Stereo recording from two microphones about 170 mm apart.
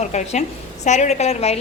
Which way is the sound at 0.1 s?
45° left (ahead or behind).